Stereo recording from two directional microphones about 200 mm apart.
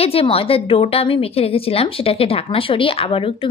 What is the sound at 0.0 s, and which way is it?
Speech, 30° left (ahead or behind).